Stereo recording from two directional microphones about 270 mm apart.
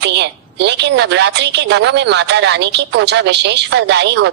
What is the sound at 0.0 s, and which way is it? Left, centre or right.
A woman's voice, right.